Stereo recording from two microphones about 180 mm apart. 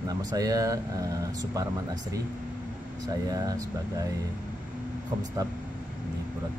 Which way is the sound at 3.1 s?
20° right (ahead or behind).